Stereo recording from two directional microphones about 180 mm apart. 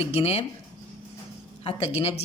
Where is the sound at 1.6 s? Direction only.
35° left (ahead or behind).